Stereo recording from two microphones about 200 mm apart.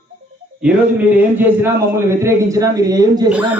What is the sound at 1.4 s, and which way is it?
A man's voice, 10° right (ahead or behind).